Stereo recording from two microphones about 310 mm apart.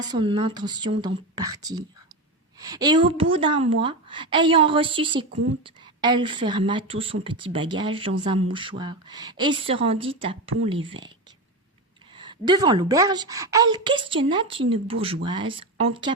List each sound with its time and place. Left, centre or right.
0.0 s a woman's voice: centre
12.1 s a woman's voice: centre